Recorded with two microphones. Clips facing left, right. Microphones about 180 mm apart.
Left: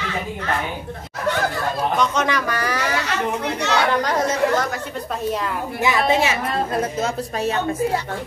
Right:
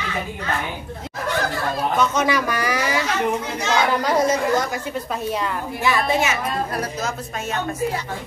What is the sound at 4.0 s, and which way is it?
Speech, 10° right (ahead or behind).